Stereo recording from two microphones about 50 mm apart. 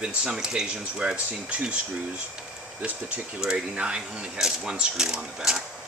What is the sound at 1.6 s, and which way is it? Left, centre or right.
Speech, centre.